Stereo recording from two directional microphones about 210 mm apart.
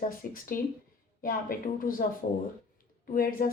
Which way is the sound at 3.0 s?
40° left (ahead or behind).